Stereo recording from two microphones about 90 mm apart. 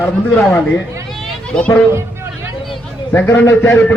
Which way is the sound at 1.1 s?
5° left (ahead or behind).